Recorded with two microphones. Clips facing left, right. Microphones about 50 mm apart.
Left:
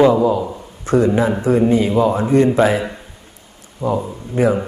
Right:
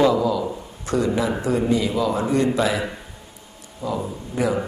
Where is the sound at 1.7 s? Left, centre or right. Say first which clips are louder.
Left 6 dB; left.